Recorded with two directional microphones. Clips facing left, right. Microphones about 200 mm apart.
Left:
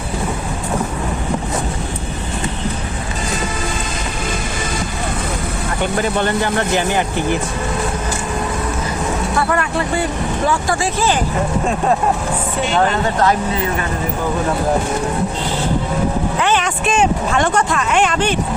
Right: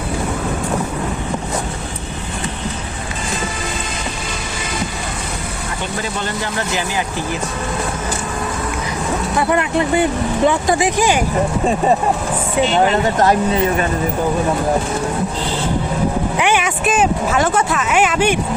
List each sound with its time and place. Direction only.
6.0 s speech: 55° left (ahead or behind)
9.4 s speech: 20° right (ahead or behind)
16.4 s speech: 10° right (ahead or behind)